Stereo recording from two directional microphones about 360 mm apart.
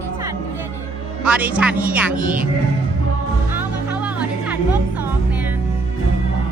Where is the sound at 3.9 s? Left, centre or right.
Centre.